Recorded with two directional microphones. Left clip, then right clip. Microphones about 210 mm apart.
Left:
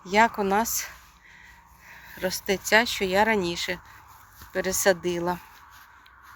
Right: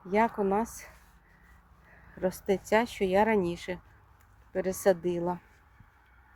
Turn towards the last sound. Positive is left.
turn(degrees=-10)  # may be behind; listen again after turning